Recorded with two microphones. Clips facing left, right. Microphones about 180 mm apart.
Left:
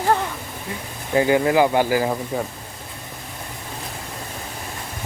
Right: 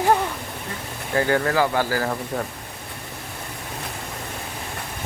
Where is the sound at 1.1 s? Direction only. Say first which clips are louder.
Left 4 dB; 15° left (ahead or behind).